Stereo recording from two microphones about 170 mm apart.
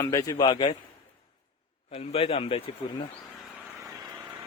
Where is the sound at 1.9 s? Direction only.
35° left (ahead or behind).